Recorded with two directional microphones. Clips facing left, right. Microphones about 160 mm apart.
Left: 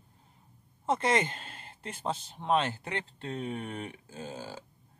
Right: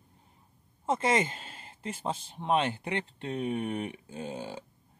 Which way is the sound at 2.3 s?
10° right (ahead or behind).